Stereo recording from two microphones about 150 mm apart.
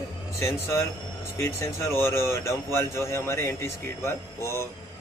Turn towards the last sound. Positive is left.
turn(degrees=20)  # may be behind; listen again after turning